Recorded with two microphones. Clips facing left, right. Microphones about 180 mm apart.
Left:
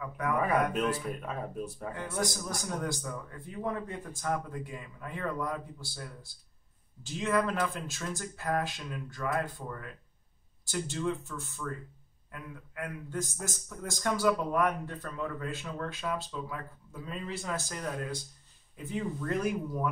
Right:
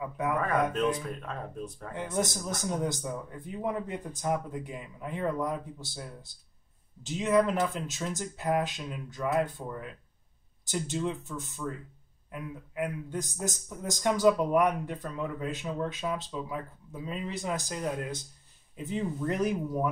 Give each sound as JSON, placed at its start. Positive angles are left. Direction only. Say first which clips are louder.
{"t": 0.7, "sound": "speech", "louder": "right 2 dB", "side_deg": 5}
{"t": 2.1, "sound": "a man's voice", "louder": "right 4 dB", "side_deg": -20}